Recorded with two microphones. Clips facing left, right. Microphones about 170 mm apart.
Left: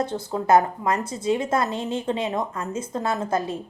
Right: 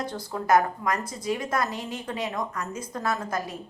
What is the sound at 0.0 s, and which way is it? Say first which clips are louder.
A woman's voice: left 6 dB; 25° left (ahead or behind).